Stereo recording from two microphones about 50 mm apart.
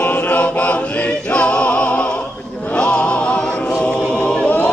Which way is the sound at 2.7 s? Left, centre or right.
Centre.